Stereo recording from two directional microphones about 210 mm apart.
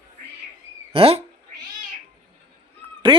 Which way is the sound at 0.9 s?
25° right (ahead or behind).